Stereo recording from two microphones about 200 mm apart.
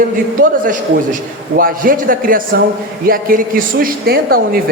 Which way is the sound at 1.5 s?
45° right (ahead or behind).